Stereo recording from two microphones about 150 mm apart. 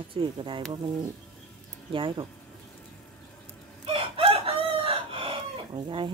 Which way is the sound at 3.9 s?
40° right (ahead or behind).